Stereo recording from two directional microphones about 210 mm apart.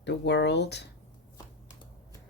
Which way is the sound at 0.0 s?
55° left (ahead or behind).